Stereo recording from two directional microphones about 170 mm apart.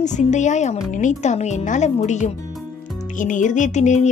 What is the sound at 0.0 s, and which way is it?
Speech, 45° left (ahead or behind).